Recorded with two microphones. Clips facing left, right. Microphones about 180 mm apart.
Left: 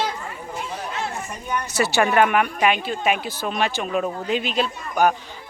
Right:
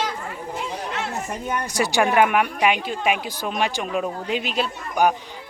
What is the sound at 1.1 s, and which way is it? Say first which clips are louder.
Speech: right 1 dB; 45° right (ahead or behind).